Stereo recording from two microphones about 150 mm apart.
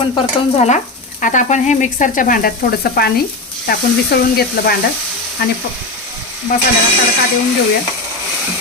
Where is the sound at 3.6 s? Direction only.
90° left.